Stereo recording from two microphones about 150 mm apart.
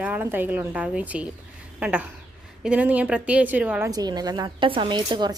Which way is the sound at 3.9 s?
25° right (ahead or behind).